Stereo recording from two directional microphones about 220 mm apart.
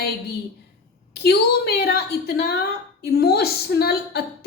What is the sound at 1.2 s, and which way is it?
A woman's voice, 45° left (ahead or behind).